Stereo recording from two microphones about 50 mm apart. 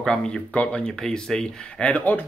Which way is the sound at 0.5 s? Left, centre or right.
Left.